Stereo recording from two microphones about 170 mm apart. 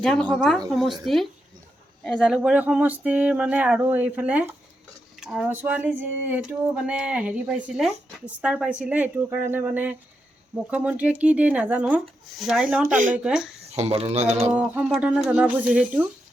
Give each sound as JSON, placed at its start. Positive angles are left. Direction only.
{"t": 0.0, "sound": "speech", "side_deg": 5}
{"t": 12.9, "sound": "speech", "side_deg": -50}
{"t": 13.1, "sound": "speech", "side_deg": -5}
{"t": 13.7, "sound": "speech", "side_deg": -35}
{"t": 14.5, "sound": "speech", "side_deg": -5}